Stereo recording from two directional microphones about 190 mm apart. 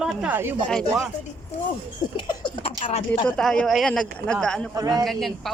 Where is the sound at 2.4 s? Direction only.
25° left (ahead or behind).